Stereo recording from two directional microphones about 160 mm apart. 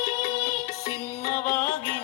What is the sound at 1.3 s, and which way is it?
Music, 15° left (ahead or behind).